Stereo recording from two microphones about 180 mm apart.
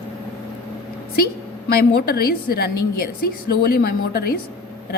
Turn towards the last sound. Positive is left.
turn(degrees=60)  # may be behind; listen again after turning